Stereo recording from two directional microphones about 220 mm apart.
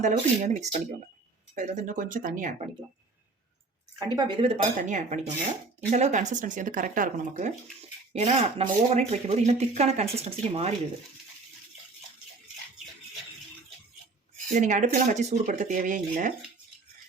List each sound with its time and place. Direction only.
0.0 s speech: 35° right (ahead or behind)
3.9 s speech: 20° right (ahead or behind)
14.5 s speech: 35° right (ahead or behind)